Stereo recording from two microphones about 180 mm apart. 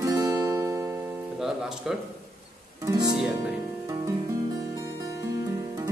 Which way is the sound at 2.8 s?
20° right (ahead or behind).